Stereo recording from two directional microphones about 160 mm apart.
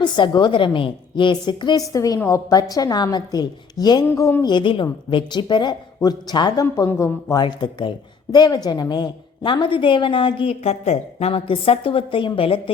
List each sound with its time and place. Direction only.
0.0 s a woman's voice: 30° left (ahead or behind)
4.0 s speech: 15° left (ahead or behind)
4.4 s a woman's voice: 30° left (ahead or behind)
7.4 s speech: 30° left (ahead or behind)